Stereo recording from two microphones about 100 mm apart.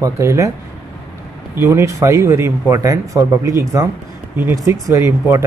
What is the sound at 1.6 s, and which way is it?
Speech, 30° right (ahead or behind).